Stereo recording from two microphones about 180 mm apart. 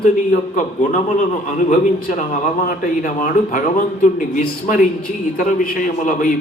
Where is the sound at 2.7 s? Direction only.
50° left (ahead or behind).